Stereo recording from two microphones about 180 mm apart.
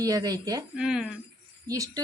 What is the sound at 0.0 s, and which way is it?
Speech, 20° right (ahead or behind).